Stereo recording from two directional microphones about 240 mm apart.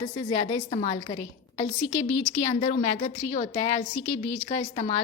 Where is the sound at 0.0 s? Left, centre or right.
Left.